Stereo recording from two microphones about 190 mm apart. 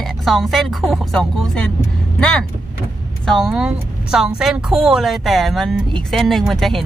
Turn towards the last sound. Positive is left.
turn(degrees=0)  # may be behind; listen again after turning